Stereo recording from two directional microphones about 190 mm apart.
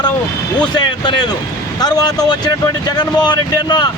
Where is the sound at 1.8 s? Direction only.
20° left (ahead or behind).